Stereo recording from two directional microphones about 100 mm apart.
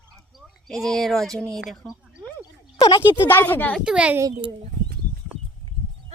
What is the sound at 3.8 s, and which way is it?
Speech, 10° right (ahead or behind).